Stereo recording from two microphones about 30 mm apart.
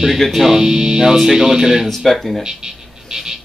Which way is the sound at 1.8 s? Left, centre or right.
Centre.